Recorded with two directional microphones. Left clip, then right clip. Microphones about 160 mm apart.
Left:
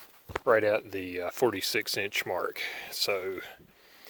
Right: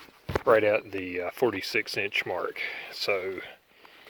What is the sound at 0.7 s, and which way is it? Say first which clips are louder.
Speech: right 2 dB; 25° left (ahead or behind).